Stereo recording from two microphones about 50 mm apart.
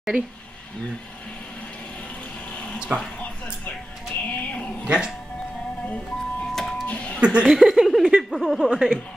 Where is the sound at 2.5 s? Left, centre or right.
Left.